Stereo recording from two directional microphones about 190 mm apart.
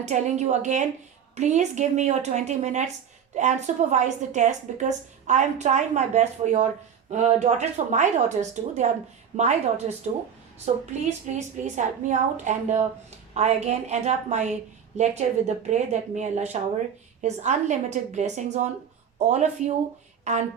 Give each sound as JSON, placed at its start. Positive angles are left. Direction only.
{"t": 0.0, "sound": "a woman's voice", "side_deg": -35}
{"t": 11.0, "sound": "a woman's voice", "side_deg": -40}